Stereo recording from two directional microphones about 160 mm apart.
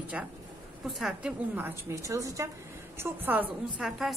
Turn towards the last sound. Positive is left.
turn(degrees=0)  # may be behind; listen again after turning